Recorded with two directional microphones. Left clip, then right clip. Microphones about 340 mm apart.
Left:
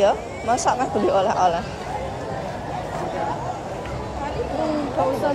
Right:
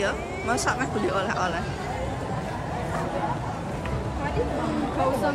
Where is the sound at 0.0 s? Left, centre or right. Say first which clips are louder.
Left 8 dB; centre.